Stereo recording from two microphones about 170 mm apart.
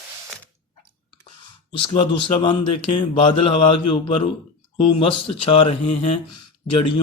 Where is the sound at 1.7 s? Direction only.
30° left (ahead or behind).